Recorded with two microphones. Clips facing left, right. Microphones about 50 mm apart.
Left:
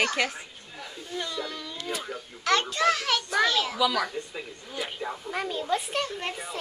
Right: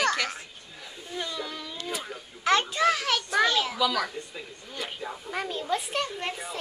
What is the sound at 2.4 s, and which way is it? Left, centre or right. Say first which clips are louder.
A woman's voice: right 1 dB; centre.